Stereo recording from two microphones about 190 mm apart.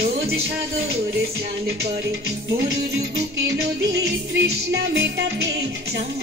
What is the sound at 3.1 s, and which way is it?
Music, 60° right (ahead or behind).